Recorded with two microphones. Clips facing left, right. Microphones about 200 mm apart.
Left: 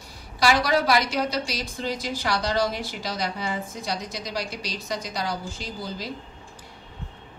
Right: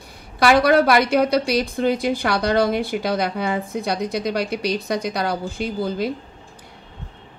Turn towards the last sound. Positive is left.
turn(degrees=-55)  # may be behind; listen again after turning